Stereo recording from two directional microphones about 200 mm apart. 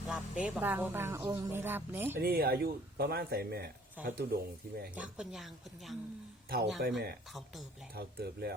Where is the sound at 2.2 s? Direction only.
50° right (ahead or behind).